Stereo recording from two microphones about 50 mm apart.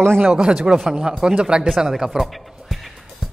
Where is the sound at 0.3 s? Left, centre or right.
Centre.